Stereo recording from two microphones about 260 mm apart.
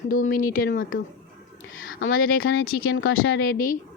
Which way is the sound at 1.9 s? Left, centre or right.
Left.